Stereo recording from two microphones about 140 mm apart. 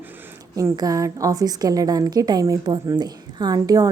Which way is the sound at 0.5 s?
25° right (ahead or behind).